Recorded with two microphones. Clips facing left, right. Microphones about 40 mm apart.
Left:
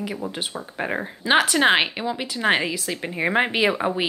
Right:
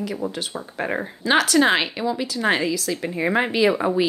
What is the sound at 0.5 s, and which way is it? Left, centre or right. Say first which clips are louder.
Speech: right 1 dB; centre.